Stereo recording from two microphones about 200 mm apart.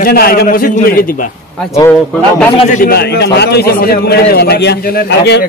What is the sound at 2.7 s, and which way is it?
A man's voice, 45° left (ahead or behind).